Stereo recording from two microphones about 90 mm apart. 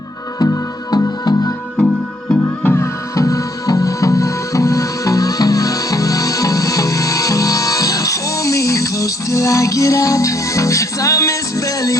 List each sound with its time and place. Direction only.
0.3 s music: 45° left (ahead or behind)
2.6 s music: 30° left (ahead or behind)